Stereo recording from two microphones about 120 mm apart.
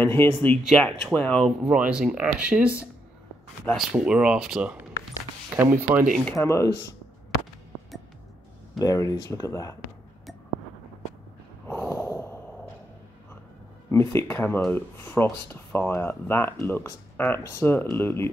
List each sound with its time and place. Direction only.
0.0 s speech: 20° left (ahead or behind)
0.7 s speech: 5° left (ahead or behind)
1.4 s speech: 5° right (ahead or behind)
3.7 s speech: 5° right (ahead or behind)
5.5 s speech: 15° right (ahead or behind)
6.3 s speech: 25° left (ahead or behind)
8.7 s speech: 30° left (ahead or behind)
11.6 s snort: 20° left (ahead or behind)
13.8 s speech: 20° left (ahead or behind)